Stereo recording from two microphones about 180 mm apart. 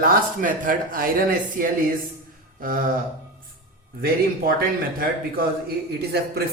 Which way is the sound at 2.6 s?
50° right (ahead or behind).